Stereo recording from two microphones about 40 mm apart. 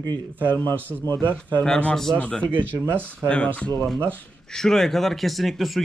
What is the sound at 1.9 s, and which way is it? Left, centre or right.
Speech, centre.